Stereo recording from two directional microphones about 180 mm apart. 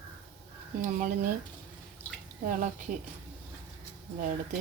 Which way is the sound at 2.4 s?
45° right (ahead or behind).